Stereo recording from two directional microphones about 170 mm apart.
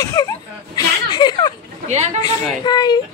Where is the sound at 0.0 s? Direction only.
20° left (ahead or behind).